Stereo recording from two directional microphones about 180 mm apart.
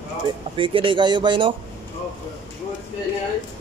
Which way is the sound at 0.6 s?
30° right (ahead or behind).